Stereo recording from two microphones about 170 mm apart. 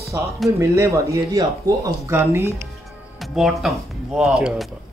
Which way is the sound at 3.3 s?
Centre (ahead or behind).